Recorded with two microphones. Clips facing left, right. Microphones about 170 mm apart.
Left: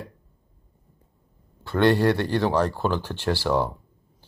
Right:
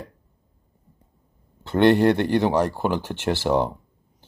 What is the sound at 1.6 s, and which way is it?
Speech, 20° right (ahead or behind).